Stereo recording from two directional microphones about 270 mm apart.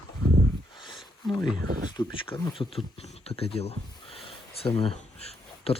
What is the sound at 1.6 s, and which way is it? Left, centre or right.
Speech, right.